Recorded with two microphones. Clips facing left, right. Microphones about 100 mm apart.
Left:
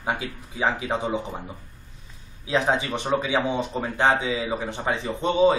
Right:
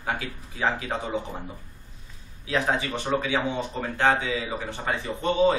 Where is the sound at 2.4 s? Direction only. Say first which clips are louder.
Left 3 dB; 20° left (ahead or behind).